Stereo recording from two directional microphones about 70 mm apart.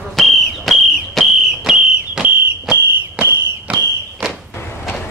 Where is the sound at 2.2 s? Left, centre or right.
Right.